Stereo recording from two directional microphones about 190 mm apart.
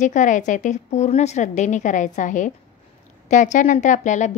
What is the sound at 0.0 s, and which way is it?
A woman's voice, 40° left (ahead or behind).